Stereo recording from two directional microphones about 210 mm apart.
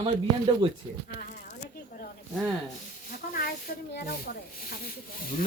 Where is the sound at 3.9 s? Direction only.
45° left (ahead or behind).